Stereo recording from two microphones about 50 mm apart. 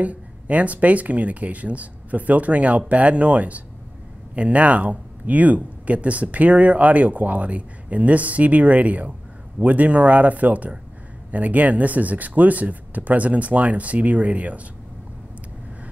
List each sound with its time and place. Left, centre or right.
0.0 s speech: right